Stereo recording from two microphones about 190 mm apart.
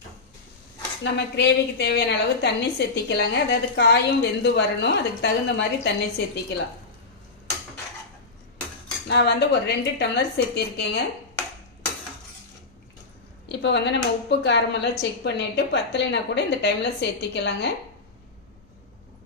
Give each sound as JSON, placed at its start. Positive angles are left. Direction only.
{"t": 1.0, "sound": "a woman's voice", "side_deg": 65}
{"t": 9.0, "sound": "a woman's voice", "side_deg": 60}
{"t": 13.5, "sound": "a woman's voice", "side_deg": 65}